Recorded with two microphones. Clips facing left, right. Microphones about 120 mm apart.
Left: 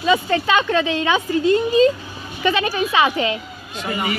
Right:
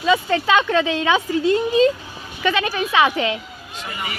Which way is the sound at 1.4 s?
90° right.